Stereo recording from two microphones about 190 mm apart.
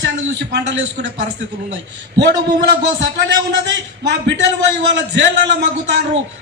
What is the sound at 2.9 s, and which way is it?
A man's voice, 70° right (ahead or behind).